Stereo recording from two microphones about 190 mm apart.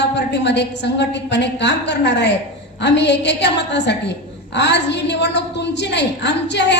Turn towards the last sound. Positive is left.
turn(degrees=65)  # may be behind; listen again after turning